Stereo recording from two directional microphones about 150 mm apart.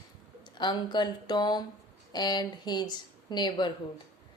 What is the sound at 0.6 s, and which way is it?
A woman's voice, 30° left (ahead or behind).